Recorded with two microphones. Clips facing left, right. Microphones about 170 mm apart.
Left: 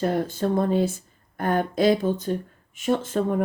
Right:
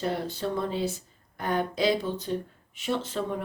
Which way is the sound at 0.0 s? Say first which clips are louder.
Left 6 dB; 50° left (ahead or behind).